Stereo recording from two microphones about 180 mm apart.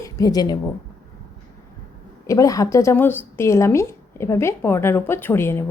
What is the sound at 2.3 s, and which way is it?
Speech, 20° left (ahead or behind).